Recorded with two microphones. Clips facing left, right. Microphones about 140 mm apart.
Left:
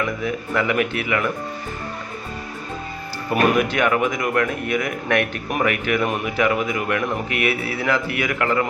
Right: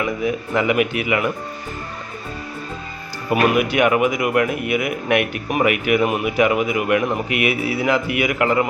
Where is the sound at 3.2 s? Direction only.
10° right (ahead or behind).